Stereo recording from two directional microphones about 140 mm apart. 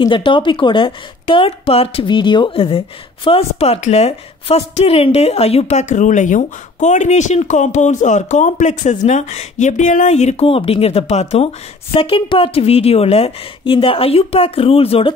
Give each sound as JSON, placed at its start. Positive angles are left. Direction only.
{"t": 0.0, "sound": "a woman's voice", "side_deg": 35}